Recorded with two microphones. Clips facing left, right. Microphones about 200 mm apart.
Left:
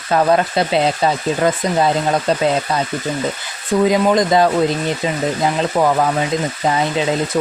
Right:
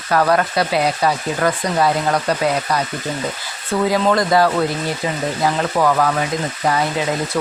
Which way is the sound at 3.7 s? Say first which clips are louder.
Left 3 dB; 15° left (ahead or behind).